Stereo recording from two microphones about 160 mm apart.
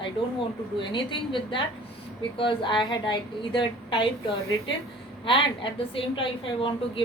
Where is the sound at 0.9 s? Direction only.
30° left (ahead or behind).